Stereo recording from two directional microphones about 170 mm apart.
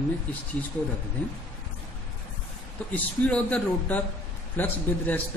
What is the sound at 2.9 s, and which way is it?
Speech, 10° left (ahead or behind).